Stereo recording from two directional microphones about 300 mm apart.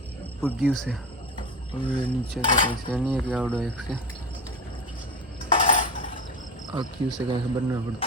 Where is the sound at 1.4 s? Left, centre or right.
Centre.